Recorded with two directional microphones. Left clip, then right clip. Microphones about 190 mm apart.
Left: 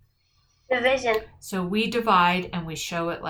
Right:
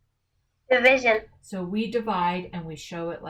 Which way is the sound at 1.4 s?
20° left (ahead or behind).